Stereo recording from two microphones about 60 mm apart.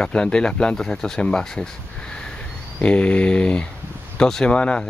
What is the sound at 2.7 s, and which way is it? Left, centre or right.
Speech, left.